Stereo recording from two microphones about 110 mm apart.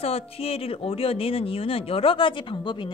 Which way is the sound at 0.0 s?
65° left (ahead or behind).